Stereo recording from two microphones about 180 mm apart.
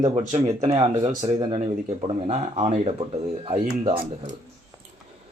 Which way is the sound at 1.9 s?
35° right (ahead or behind).